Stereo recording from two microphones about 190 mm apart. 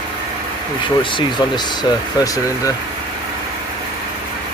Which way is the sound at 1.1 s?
20° left (ahead or behind).